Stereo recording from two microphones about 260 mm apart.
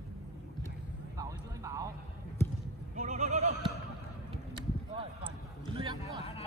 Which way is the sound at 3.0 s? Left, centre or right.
Right.